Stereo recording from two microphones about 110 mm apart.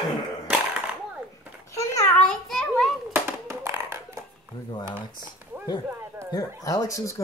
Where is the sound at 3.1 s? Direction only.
20° right (ahead or behind).